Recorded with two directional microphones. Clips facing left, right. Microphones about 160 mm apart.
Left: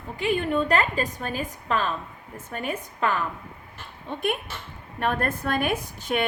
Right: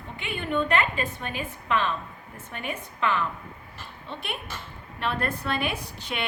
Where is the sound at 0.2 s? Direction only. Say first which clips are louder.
Left 4 dB; 40° left (ahead or behind).